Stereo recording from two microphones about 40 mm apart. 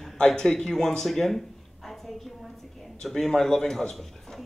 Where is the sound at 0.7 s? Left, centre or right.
Centre.